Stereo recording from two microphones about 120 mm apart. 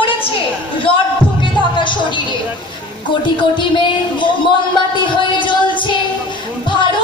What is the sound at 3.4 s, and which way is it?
Speech, 40° left (ahead or behind).